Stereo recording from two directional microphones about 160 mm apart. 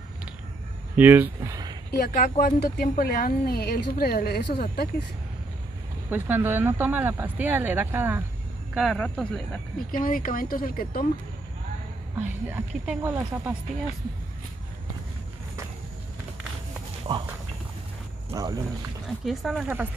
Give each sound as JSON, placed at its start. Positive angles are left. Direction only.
{"t": 0.9, "sound": "speech", "side_deg": -10}
{"t": 1.9, "sound": "speech", "side_deg": 80}
{"t": 6.0, "sound": "speech", "side_deg": -10}
{"t": 8.7, "sound": "speech", "side_deg": 5}
{"t": 10.0, "sound": "speech", "side_deg": 60}
{"t": 12.2, "sound": "speech", "side_deg": -10}
{"t": 17.1, "sound": "speech", "side_deg": -30}
{"t": 18.3, "sound": "speech", "side_deg": -20}
{"t": 19.2, "sound": "speech", "side_deg": 0}